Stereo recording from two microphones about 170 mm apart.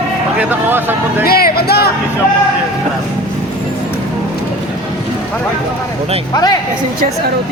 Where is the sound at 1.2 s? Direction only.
65° left (ahead or behind).